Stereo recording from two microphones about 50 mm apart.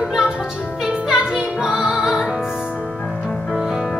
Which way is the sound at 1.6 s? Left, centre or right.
Centre.